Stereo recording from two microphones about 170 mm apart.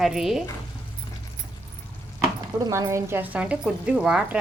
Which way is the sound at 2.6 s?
20° right (ahead or behind).